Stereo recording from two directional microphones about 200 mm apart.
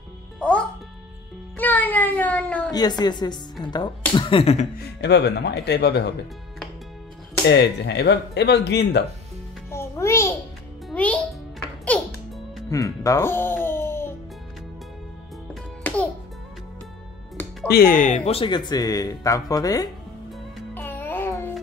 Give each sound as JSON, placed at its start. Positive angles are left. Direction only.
{"t": 0.4, "sound": "music", "side_deg": 5}
{"t": 1.6, "sound": "a sound", "side_deg": 10}
{"t": 2.7, "sound": "speech", "side_deg": 20}
{"t": 4.7, "sound": "speech", "side_deg": 55}
{"t": 7.4, "sound": "speech", "side_deg": 60}
{"t": 9.7, "sound": "music", "side_deg": 15}
{"t": 12.6, "sound": "music", "side_deg": 15}
{"t": 15.8, "sound": "music", "side_deg": 10}
{"t": 17.6, "sound": "speech", "side_deg": 50}
{"t": 20.5, "sound": "music", "side_deg": 10}